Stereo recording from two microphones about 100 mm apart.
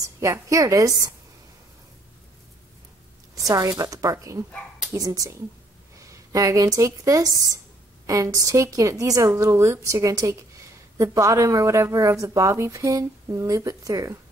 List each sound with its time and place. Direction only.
0.0 s a woman's voice: 35° right (ahead or behind)
3.3 s a woman's voice: 35° right (ahead or behind)